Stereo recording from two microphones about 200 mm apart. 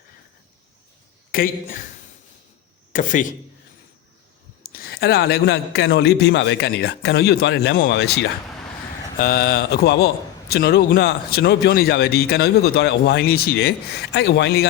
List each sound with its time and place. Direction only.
1.3 s speech: 45° left (ahead or behind)
2.9 s a man's voice: 40° left (ahead or behind)
4.7 s a man's voice: 50° left (ahead or behind)
9.1 s speech: 45° left (ahead or behind)